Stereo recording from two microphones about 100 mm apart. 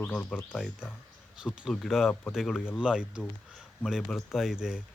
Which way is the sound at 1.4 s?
5° right (ahead or behind).